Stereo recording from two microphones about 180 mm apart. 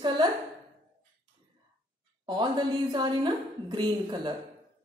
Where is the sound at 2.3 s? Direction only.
25° right (ahead or behind).